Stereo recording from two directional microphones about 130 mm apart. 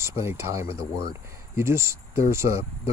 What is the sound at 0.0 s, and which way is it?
Speech, 20° right (ahead or behind).